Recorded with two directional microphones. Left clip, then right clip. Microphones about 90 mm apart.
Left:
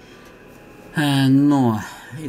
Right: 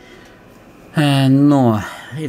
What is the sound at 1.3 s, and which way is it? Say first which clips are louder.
Speech: right 5 dB; 35° right (ahead or behind).